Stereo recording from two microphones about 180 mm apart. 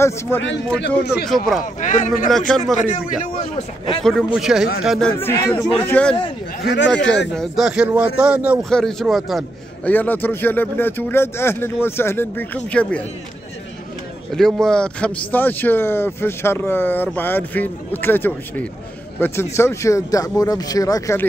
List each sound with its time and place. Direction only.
0.7 s speech: 65° left (ahead or behind)
1.2 s speech: centre (ahead or behind)
1.6 s speech: 45° left (ahead or behind)
2.2 s speech: centre (ahead or behind)
3.5 s speech: 30° left (ahead or behind)
4.0 s speech: 5° left (ahead or behind)
5.2 s speech: 15° left (ahead or behind)
6.6 s speech: 70° left (ahead or behind)
7.3 s speech: centre (ahead or behind)
9.8 s speech: 10° left (ahead or behind)
14.3 s speech: 5° left (ahead or behind)